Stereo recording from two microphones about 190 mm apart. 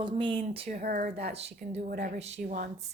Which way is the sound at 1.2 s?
35° right (ahead or behind).